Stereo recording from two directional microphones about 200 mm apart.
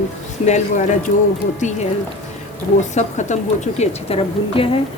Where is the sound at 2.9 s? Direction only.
35° left (ahead or behind).